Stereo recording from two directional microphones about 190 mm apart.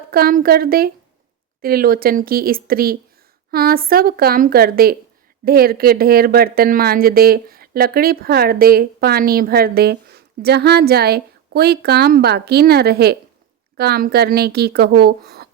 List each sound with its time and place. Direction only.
0.1 s a woman's voice: 50° right (ahead or behind)